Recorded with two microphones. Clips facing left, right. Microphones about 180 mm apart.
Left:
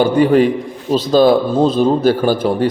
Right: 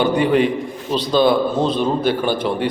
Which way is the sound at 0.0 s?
45° left (ahead or behind).